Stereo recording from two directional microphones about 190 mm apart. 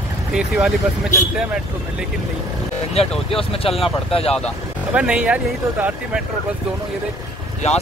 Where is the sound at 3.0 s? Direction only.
35° left (ahead or behind).